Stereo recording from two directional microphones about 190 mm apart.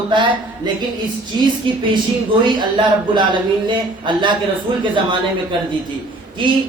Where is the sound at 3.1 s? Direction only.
25° right (ahead or behind).